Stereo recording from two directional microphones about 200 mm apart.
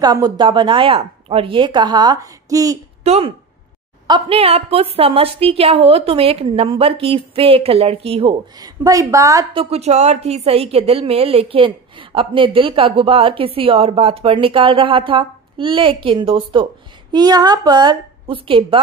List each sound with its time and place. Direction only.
0.0 s a woman's voice: 20° right (ahead or behind)
3.0 s a woman's voice: 30° right (ahead or behind)